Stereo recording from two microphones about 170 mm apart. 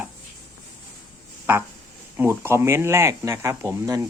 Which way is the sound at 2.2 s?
15° right (ahead or behind).